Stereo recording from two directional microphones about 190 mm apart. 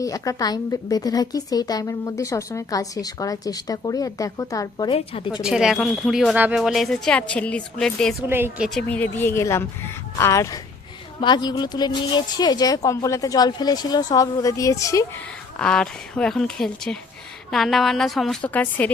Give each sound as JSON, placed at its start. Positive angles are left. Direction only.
{"t": 0.0, "sound": "a woman's voice", "side_deg": 15}
{"t": 4.9, "sound": "a woman's voice", "side_deg": 30}
{"t": 5.4, "sound": "speech", "side_deg": -5}
{"t": 8.3, "sound": "speech", "side_deg": -10}
{"t": 8.9, "sound": "a woman's voice", "side_deg": 10}
{"t": 15.5, "sound": "speech", "side_deg": 5}